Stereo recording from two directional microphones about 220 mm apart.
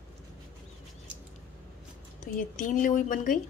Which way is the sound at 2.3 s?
35° left (ahead or behind).